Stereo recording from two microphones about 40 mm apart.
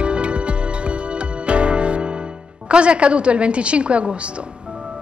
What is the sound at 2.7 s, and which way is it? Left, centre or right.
A woman's voice, right.